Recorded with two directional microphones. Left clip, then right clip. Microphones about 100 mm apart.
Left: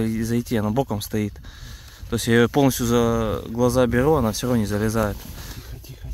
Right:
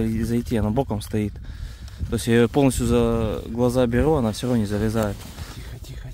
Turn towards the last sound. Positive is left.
turn(degrees=-25)  # may be behind; listen again after turning